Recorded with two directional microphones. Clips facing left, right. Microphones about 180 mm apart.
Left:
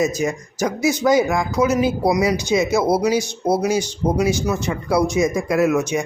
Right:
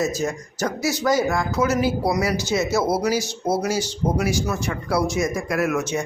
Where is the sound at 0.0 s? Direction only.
10° left (ahead or behind).